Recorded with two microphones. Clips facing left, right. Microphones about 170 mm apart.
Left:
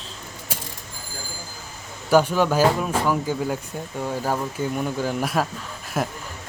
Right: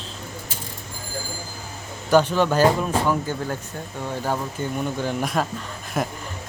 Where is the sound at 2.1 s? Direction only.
10° left (ahead or behind).